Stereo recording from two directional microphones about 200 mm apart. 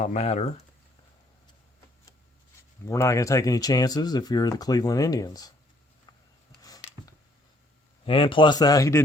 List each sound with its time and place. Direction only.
0.0 s speech: 35° left (ahead or behind)
2.8 s speech: 15° left (ahead or behind)
6.6 s a sound: 20° left (ahead or behind)
8.0 s speech: 25° left (ahead or behind)